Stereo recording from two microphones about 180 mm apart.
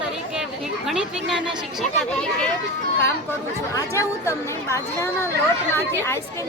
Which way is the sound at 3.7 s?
15° left (ahead or behind).